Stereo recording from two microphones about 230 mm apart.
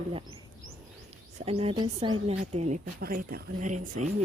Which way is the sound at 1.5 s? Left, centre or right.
Right.